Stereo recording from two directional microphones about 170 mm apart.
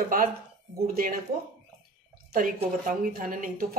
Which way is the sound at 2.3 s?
55° right (ahead or behind).